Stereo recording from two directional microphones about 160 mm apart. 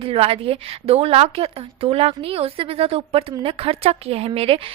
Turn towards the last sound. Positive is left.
turn(degrees=-35)  # may be behind; listen again after turning